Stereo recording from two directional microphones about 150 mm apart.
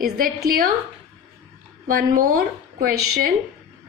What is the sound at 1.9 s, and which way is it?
A woman's voice, 70° right (ahead or behind).